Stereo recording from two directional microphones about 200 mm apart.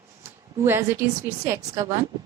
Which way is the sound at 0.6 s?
10° right (ahead or behind).